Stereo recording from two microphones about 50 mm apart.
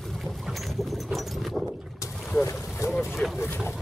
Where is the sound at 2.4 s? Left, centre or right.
Left.